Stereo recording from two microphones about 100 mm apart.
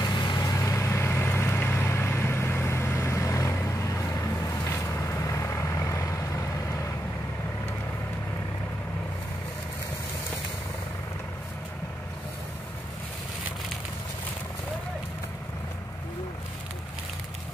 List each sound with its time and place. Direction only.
0.0 s vehicle: 45° left (ahead or behind)